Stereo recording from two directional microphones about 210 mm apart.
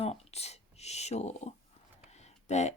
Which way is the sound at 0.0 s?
30° left (ahead or behind).